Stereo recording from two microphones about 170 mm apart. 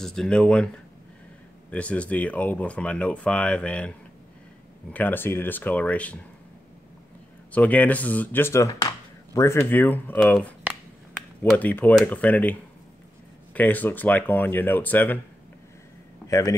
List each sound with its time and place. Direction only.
0.0 s speech: 5° left (ahead or behind)
1.7 s speech: 10° left (ahead or behind)
4.9 s speech: 10° left (ahead or behind)
7.5 s speech: 10° left (ahead or behind)
11.5 s speech: 10° left (ahead or behind)
16.3 s a man's voice: 20° left (ahead or behind)